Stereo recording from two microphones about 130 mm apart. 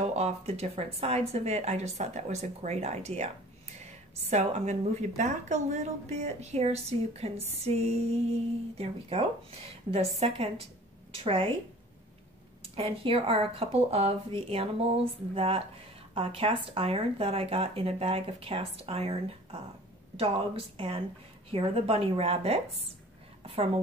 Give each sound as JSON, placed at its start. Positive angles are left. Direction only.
{"t": 0.1, "sound": "a woman's voice", "side_deg": -55}
{"t": 12.7, "sound": "a woman's voice", "side_deg": -45}